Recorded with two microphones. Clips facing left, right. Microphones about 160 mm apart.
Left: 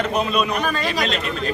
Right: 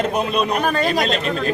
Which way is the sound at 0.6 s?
45° right (ahead or behind).